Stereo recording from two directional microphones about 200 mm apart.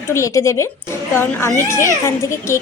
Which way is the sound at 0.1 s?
15° left (ahead or behind).